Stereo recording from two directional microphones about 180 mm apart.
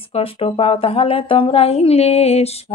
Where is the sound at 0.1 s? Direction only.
30° left (ahead or behind).